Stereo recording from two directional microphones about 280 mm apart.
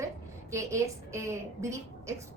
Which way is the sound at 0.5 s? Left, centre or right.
Centre.